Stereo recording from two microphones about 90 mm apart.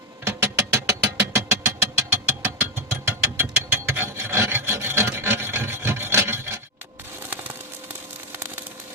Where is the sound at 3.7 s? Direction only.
20° right (ahead or behind).